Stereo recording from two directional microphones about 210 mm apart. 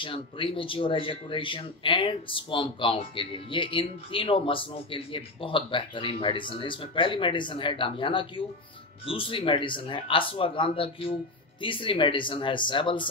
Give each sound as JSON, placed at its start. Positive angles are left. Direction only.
{"t": 0.0, "sound": "speech", "side_deg": 25}